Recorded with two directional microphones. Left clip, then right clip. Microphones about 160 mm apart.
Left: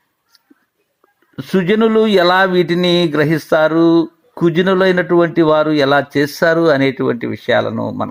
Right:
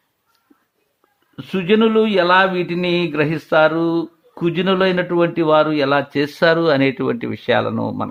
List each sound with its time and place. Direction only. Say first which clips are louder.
1.4 s speech: left 2 dB; 30° left (ahead or behind); by 8.0 s 5° left (ahead or behind)